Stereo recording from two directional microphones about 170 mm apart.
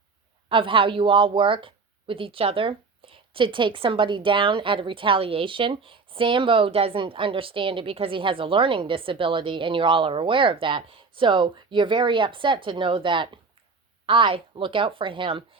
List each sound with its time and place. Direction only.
0.4 s a woman's voice: 30° right (ahead or behind)